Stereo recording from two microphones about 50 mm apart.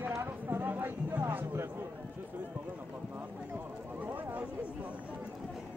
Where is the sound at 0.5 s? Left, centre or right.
Right.